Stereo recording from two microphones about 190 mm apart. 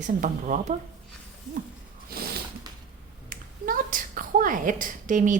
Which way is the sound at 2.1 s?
55° right (ahead or behind).